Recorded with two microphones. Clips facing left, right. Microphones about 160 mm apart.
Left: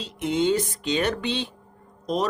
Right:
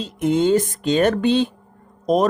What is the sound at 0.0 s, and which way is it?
Speech, 45° right (ahead or behind).